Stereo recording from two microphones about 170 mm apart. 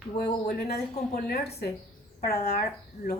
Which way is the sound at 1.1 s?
45° left (ahead or behind).